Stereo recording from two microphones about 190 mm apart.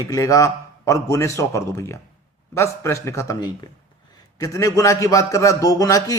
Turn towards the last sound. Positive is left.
turn(degrees=20)  # may be behind; listen again after turning